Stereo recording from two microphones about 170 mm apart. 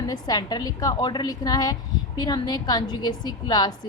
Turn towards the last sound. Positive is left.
turn(degrees=25)  # may be behind; listen again after turning